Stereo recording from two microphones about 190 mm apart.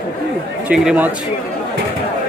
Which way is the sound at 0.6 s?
10° right (ahead or behind).